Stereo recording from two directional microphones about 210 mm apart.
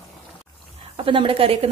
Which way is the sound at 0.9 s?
25° right (ahead or behind).